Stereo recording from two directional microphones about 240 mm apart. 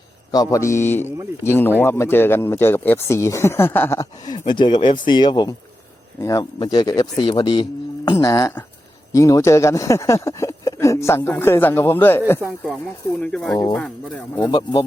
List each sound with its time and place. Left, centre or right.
0.3 s speech: centre
12.4 s speech: centre
14.5 s speech: centre